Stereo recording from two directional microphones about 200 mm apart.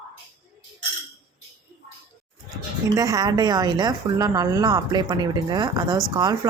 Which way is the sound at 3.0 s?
15° right (ahead or behind).